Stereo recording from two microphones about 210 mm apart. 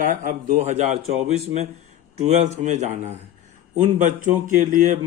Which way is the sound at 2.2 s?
35° right (ahead or behind).